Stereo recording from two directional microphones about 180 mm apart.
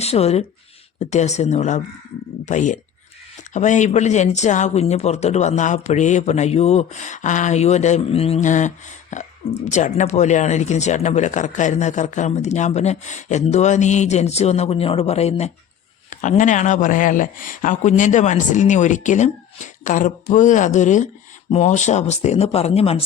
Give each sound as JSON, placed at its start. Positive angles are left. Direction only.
{"t": 0.0, "sound": "speech", "side_deg": 35}